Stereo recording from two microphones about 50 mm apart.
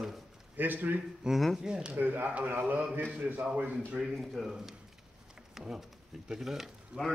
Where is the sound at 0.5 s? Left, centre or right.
Right.